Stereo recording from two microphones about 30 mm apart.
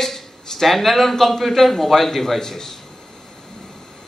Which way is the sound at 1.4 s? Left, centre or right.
Centre.